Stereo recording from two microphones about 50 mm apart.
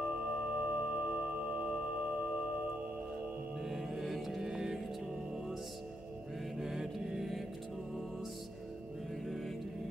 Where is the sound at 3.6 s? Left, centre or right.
Centre.